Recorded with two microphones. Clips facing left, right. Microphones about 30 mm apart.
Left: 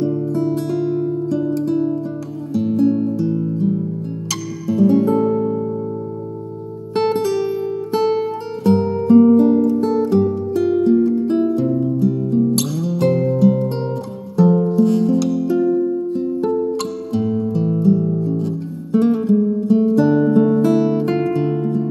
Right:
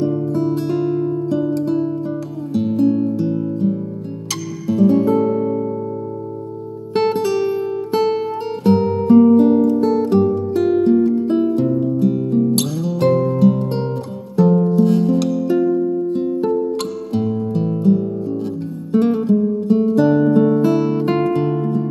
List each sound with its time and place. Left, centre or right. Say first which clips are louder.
0.0 s music: right 1 dB; centre
4.8 s music: even; centre
7.0 s music: right 1 dB; centre
10.6 s music: even; right
11.7 s music: right 1 dB; centre
12.0 s music: right 1 dB; centre
13.1 s music: right 1 dB; centre
13.5 s guitar: even; centre
14.3 s music: even; centre
16.2 s music: right 1 dB; centre
17.8 s music: even; centre
18.1 s guitar: left 2 dB; centre
19.7 s music: even; centre